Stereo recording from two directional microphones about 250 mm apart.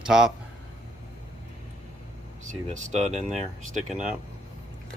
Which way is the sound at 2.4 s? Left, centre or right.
Right.